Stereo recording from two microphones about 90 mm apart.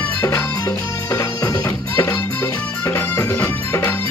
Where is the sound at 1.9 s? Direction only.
25° left (ahead or behind).